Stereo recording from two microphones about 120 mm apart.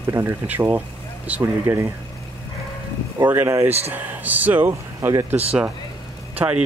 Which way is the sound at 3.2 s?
20° right (ahead or behind).